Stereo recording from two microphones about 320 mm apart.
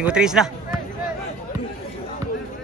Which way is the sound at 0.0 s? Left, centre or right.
Centre.